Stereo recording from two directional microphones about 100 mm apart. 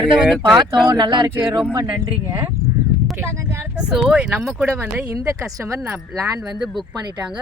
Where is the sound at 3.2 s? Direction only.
25° right (ahead or behind).